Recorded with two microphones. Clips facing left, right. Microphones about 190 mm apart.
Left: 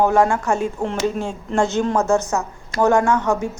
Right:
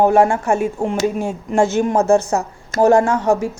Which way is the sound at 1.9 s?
30° right (ahead or behind).